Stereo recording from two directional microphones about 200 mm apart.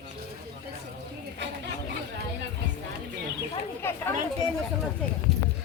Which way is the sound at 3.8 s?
10° left (ahead or behind).